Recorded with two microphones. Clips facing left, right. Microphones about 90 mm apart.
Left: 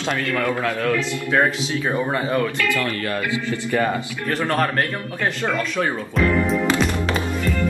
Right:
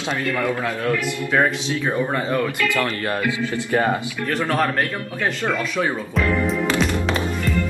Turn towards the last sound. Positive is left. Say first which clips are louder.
# even
turn(degrees=0)  # may be behind; listen again after turning